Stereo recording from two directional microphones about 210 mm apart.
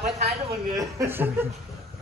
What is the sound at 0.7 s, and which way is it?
Speech, 10° right (ahead or behind).